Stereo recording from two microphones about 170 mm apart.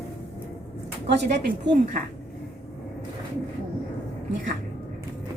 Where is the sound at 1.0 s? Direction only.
85° right.